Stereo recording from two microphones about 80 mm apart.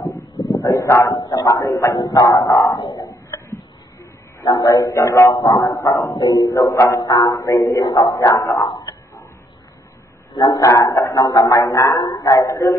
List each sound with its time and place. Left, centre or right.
0.5 s speech: left
1.1 s music: left
2.8 s music: left
4.6 s a man's voice: left
5.3 s music: left
5.8 s a man's voice: left
6.2 s music: left
7.4 s a man's voice: left
10.3 s speech: left
10.6 s a man's voice: left
11.2 s music: left
12.0 s music: left